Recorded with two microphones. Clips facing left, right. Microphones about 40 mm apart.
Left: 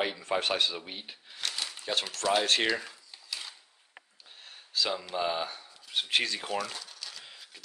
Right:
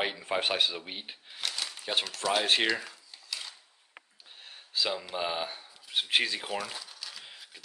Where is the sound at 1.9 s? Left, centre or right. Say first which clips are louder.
Right 1 dB; centre.